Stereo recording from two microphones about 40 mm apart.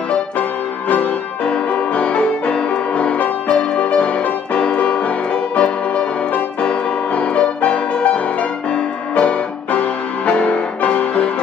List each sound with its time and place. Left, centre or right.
1.4 s music: left